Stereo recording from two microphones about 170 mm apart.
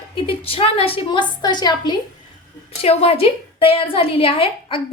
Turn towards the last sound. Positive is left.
turn(degrees=30)  # may be behind; listen again after turning